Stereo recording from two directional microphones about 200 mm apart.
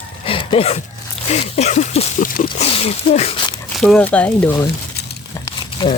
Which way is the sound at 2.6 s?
30° left (ahead or behind).